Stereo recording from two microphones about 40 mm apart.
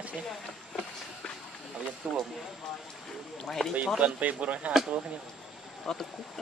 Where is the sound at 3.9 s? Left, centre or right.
Right.